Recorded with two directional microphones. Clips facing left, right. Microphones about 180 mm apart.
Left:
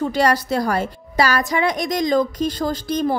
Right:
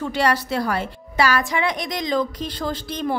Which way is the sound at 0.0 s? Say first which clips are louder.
Left 3 dB; 40° left (ahead or behind).